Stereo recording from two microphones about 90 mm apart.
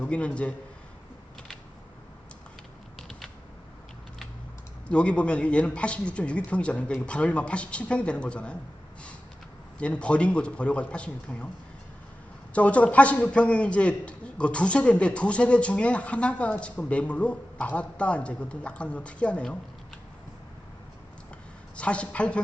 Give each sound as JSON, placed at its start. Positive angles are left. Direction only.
{"t": 0.0, "sound": "a man's voice", "side_deg": 15}
{"t": 4.9, "sound": "a man's voice", "side_deg": 10}
{"t": 9.7, "sound": "a man's voice", "side_deg": 15}
{"t": 12.5, "sound": "a man's voice", "side_deg": 15}
{"t": 21.8, "sound": "a man's voice", "side_deg": 15}